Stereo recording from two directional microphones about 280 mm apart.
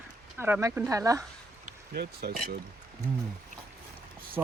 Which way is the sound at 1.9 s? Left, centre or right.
Right.